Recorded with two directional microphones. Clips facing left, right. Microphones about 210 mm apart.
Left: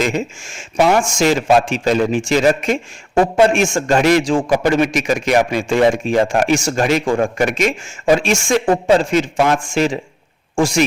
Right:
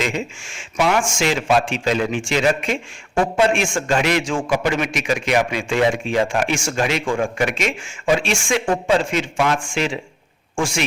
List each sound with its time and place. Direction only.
0.0 s a man's voice: 45° left (ahead or behind)